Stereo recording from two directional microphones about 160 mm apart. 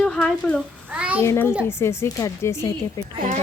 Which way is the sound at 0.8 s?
10° right (ahead or behind).